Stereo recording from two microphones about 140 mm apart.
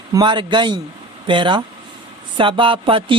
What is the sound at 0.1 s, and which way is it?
Speech, 30° right (ahead or behind).